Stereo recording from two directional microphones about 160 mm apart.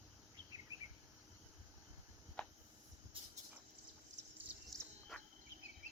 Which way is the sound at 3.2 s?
35° right (ahead or behind).